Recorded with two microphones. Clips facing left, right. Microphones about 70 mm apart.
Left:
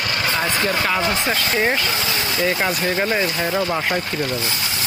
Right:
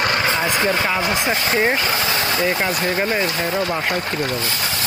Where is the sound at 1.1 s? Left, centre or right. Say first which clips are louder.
Right 1 dB; centre.